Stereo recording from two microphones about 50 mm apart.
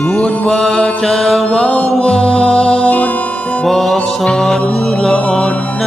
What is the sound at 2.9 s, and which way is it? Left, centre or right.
Music, left.